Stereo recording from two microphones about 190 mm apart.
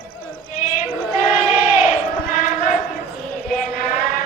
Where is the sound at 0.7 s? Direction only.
40° left (ahead or behind).